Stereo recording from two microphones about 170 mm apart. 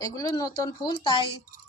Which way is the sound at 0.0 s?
20° left (ahead or behind).